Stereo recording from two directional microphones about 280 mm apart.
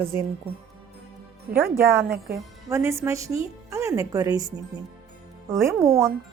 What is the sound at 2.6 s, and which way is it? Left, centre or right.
Speech, centre.